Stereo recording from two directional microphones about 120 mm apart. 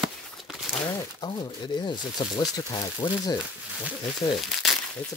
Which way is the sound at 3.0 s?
45° left (ahead or behind).